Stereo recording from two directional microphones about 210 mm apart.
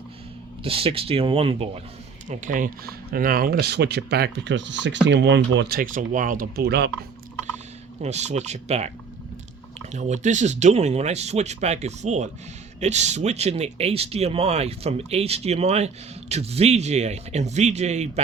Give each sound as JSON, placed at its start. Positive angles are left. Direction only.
{"t": 0.6, "sound": "speech", "side_deg": -25}
{"t": 8.0, "sound": "speech", "side_deg": -30}
{"t": 9.9, "sound": "speech", "side_deg": -35}